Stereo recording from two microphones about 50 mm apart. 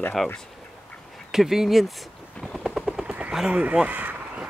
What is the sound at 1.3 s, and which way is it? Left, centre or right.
Speech, centre.